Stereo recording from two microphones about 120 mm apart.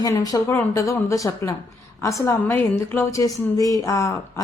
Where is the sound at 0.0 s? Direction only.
30° left (ahead or behind).